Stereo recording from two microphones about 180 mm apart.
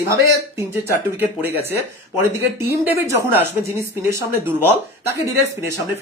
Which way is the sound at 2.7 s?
15° right (ahead or behind).